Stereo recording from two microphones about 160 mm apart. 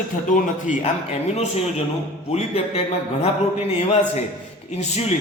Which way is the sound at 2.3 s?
40° left (ahead or behind).